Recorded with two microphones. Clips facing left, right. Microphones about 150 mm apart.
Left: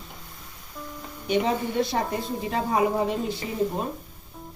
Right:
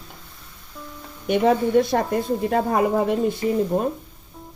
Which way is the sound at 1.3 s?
55° right (ahead or behind).